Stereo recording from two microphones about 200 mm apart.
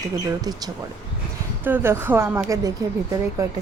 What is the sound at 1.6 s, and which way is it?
Speech, 10° right (ahead or behind).